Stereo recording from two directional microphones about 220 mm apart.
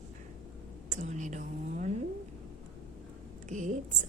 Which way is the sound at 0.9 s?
35° right (ahead or behind).